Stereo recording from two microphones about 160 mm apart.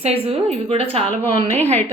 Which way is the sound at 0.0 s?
40° right (ahead or behind).